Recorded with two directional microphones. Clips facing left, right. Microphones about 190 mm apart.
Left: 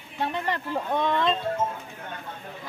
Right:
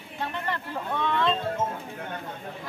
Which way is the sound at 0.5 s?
15° left (ahead or behind).